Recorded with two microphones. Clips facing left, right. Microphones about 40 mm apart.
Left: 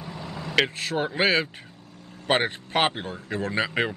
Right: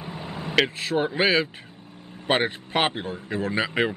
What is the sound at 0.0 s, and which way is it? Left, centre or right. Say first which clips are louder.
Vehicle: right 2 dB; right.